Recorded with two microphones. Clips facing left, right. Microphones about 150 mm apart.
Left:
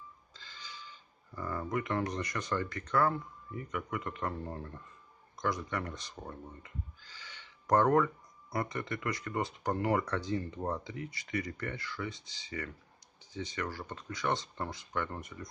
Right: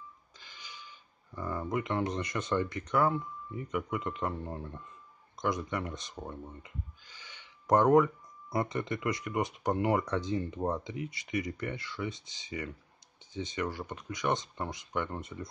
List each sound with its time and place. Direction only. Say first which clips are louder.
0.4 s speech: left 1 dB; 15° right (ahead or behind)
7.1 s a sound: left 1 dB; 15° right (ahead or behind)
8.5 s speech: right 3 dB; 20° right (ahead or behind)